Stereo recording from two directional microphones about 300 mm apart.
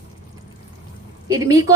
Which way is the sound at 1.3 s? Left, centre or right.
Centre.